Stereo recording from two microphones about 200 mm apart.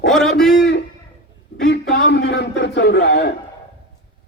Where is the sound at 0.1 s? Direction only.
Centre (ahead or behind).